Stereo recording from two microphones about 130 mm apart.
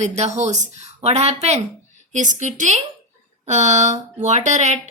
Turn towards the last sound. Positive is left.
turn(degrees=-65)  # may be behind; listen again after turning